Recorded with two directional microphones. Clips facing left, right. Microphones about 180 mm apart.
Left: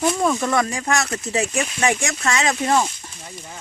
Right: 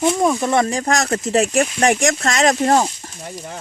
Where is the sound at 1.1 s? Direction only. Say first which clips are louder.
Right 6 dB; 75° right (ahead or behind).